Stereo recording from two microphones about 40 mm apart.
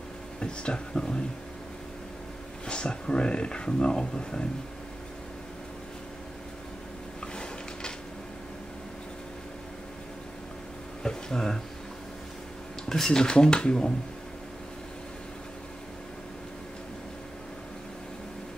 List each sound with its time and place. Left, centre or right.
0.4 s speech: left
2.6 s speech: left
11.0 s a sound: centre
12.8 s speech: centre